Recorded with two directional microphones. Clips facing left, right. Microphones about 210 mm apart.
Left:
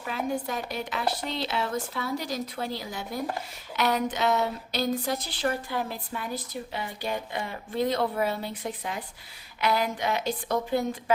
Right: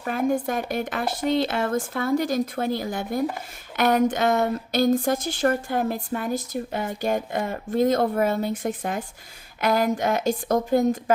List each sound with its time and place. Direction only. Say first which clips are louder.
0.0 s speech: right 7 dB; 50° right (ahead or behind)